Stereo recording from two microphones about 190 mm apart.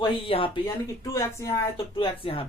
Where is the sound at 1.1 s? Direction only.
15° left (ahead or behind).